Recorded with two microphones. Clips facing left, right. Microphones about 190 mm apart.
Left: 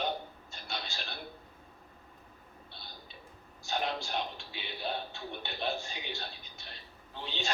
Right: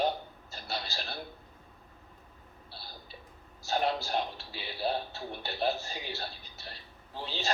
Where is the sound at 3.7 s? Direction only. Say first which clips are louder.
Right 4 dB; 35° right (ahead or behind).